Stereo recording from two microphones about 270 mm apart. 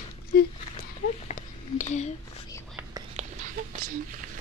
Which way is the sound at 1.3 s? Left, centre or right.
Left.